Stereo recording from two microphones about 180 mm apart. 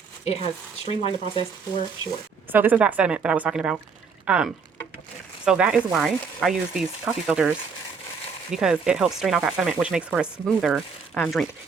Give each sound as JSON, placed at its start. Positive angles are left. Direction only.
{"t": 0.3, "sound": "speech", "side_deg": 35}
{"t": 2.5, "sound": "a woman's voice", "side_deg": -10}